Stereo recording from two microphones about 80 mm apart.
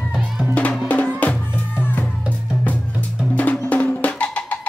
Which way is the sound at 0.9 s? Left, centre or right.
Left.